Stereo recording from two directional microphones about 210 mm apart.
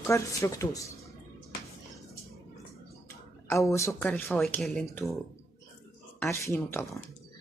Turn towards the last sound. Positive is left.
turn(degrees=10)  # may be behind; listen again after turning